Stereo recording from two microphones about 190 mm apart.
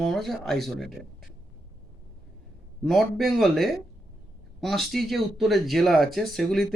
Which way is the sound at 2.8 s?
Centre (ahead or behind).